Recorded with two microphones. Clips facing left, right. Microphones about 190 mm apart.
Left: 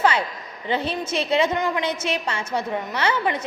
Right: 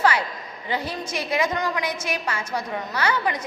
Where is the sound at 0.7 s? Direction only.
25° left (ahead or behind).